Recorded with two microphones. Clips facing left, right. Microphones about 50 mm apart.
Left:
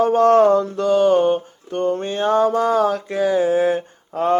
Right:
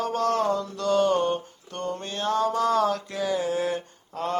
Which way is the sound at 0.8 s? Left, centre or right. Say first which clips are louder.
Left 6 dB; centre.